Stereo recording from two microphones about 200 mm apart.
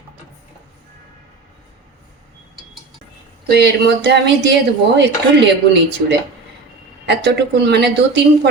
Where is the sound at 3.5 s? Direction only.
55° right (ahead or behind).